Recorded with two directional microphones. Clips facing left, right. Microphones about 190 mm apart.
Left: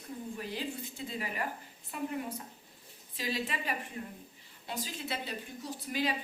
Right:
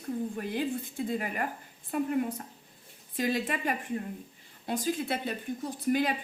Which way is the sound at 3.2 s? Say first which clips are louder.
Right 6 dB; 50° right (ahead or behind).